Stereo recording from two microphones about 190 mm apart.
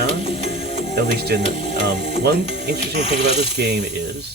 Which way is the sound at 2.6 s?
60° right (ahead or behind).